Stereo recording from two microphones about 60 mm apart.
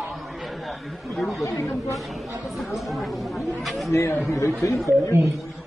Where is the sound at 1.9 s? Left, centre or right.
Centre.